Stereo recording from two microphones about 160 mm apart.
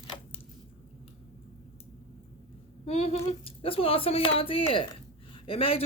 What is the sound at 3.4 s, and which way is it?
Speech, 35° left (ahead or behind).